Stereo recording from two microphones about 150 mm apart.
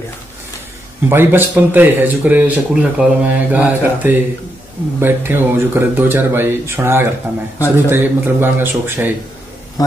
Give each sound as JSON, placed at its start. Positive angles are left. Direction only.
{"t": 1.0, "sound": "speech", "side_deg": -15}
{"t": 7.5, "sound": "a man's voice", "side_deg": 20}
{"t": 7.9, "sound": "speech", "side_deg": -15}
{"t": 9.8, "sound": "a man's voice", "side_deg": 25}